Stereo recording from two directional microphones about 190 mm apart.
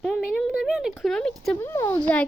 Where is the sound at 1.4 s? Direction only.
10° left (ahead or behind).